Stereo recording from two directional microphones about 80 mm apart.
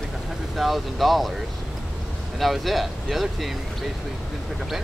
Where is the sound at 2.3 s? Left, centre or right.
Centre.